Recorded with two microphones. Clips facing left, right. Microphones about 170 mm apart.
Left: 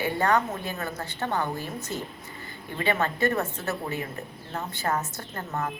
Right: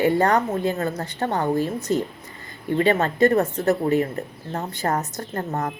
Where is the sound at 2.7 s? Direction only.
40° right (ahead or behind).